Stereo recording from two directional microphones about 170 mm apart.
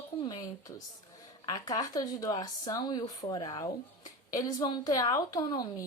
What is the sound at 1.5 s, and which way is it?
Speech, 20° left (ahead or behind).